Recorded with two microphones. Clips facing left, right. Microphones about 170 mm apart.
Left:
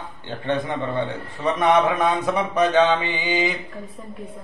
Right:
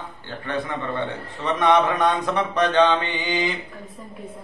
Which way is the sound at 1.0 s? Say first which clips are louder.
Left 2 dB; 10° left (ahead or behind).